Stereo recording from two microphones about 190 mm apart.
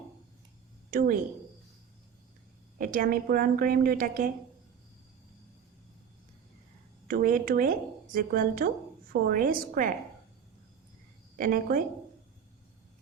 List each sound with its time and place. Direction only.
0.9 s a woman's voice: 45° right (ahead or behind)
2.7 s speech: 45° right (ahead or behind)
7.1 s speech: 45° right (ahead or behind)
11.3 s speech: 45° right (ahead or behind)